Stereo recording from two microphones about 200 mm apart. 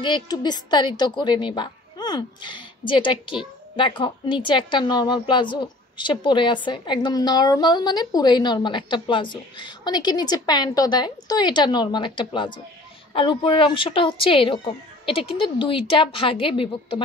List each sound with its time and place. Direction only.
0.0 s a woman's voice: 20° left (ahead or behind)